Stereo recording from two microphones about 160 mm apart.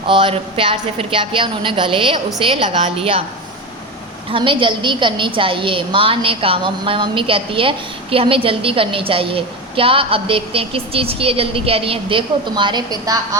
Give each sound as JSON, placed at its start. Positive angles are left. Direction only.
{"t": 0.1, "sound": "a woman's voice", "side_deg": -30}
{"t": 4.3, "sound": "a woman's voice", "side_deg": -30}